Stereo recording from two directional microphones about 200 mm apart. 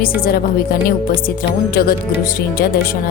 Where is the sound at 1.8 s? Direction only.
50° left (ahead or behind).